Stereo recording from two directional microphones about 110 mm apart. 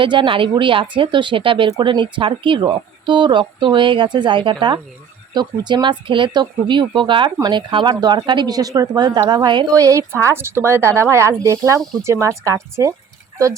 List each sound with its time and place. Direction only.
0.0 s speech: 50° right (ahead or behind)
7.3 s a woman's voice: 30° right (ahead or behind)
7.5 s speech: 45° right (ahead or behind)
9.7 s a woman's voice: 30° right (ahead or behind)
11.8 s speech: 5° left (ahead or behind)
12.0 s a woman's voice: 25° right (ahead or behind)